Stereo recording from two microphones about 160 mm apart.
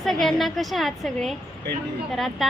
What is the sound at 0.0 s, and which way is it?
A woman's voice, centre (ahead or behind).